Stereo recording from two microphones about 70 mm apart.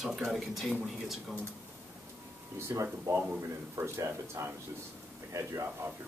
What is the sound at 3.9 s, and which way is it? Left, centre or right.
Speech, right.